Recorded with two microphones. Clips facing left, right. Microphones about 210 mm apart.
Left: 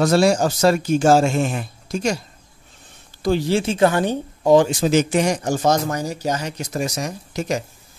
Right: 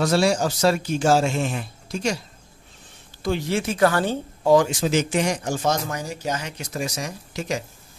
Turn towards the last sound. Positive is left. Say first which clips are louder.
# left 4 dB
turn(degrees=45)  # may be behind; listen again after turning